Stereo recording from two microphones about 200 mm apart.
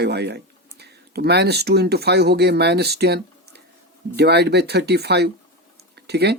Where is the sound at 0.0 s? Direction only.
55° right (ahead or behind).